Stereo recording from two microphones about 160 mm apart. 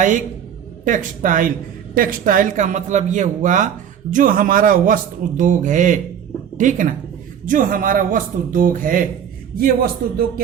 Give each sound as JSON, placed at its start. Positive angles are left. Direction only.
{"t": 0.9, "sound": "speech", "side_deg": -55}